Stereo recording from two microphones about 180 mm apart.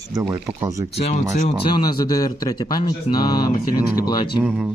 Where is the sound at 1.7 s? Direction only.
25° left (ahead or behind).